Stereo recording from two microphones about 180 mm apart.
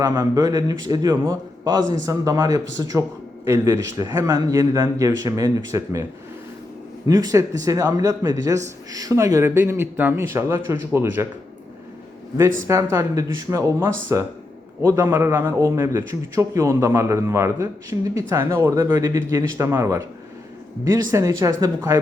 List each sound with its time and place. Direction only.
0.0 s a man's voice: 20° right (ahead or behind)
7.1 s a man's voice: 20° right (ahead or behind)
12.6 s a man's voice: 15° right (ahead or behind)